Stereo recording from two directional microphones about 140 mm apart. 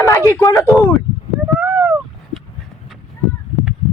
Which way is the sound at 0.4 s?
25° left (ahead or behind).